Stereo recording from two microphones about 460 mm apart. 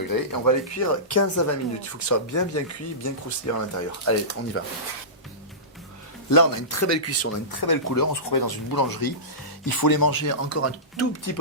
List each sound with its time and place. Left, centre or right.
0.1 s speech: left
6.3 s speech: left
7.5 s speech: left